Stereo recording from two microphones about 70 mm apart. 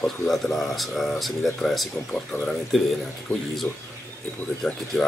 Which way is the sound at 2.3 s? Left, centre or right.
Left.